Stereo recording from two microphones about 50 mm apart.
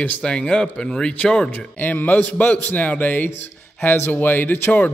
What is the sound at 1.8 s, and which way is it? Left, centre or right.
A man's voice, left.